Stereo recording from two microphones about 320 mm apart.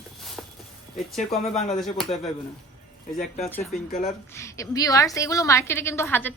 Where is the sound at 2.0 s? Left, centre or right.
Centre.